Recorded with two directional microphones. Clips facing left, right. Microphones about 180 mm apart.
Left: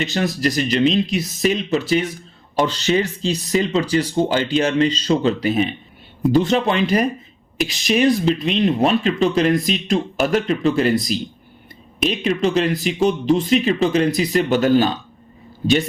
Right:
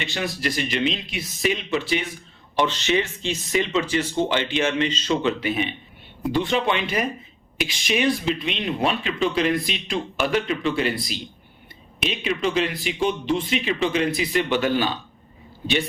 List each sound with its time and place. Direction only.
0.0 s speech: 40° left (ahead or behind)